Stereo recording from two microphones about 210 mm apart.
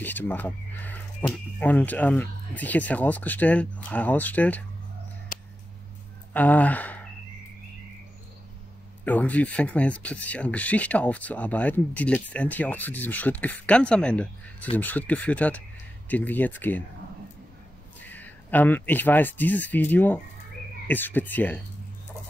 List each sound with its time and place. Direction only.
0.0 s speech: 10° left (ahead or behind)
5.3 s a sound: 40° left (ahead or behind)
6.3 s speech: 5° left (ahead or behind)
9.0 s speech: 5° left (ahead or behind)
18.0 s speech: 10° left (ahead or behind)